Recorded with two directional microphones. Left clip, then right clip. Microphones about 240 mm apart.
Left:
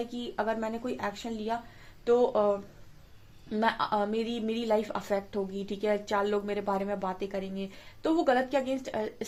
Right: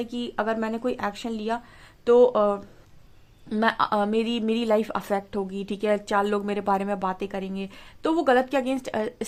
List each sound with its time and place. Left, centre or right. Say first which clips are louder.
0.0 s speech: right 4 dB; right